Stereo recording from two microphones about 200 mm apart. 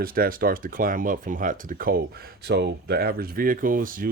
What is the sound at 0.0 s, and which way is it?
Speech, 45° right (ahead or behind).